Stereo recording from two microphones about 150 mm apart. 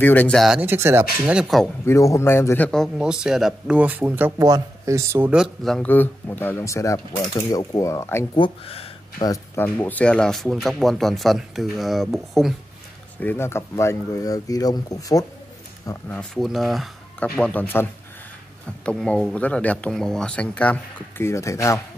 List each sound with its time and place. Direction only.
0.0 s speech: 10° left (ahead or behind)
0.6 s speech: 15° right (ahead or behind)
1.2 s speech: 5° right (ahead or behind)
1.9 s speech: 20° left (ahead or behind); by 4.3 s 10° right (ahead or behind)
4.4 s speech: 20° right (ahead or behind)
5.3 s speech: centre (ahead or behind)
5.9 s speech: 10° left (ahead or behind)
8.4 s speech: 40° left (ahead or behind)
9.2 s speech: 20° left (ahead or behind); by 12.5 s centre (ahead or behind)
13.2 s speech: 15° left (ahead or behind)
16.1 s speech: 5° left (ahead or behind)
18.9 s speech: 5° left (ahead or behind); by 21.8 s 20° left (ahead or behind)